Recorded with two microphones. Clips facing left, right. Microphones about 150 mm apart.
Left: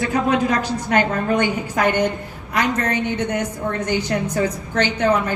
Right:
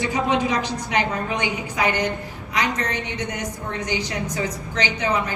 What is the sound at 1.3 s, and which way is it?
A woman's voice, 50° left (ahead or behind).